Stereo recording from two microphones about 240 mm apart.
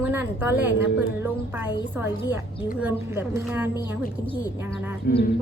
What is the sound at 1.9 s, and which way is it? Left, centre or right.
A woman's voice, centre.